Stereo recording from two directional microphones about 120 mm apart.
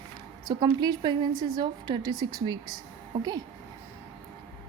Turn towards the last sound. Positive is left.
turn(degrees=-35)  # may be behind; listen again after turning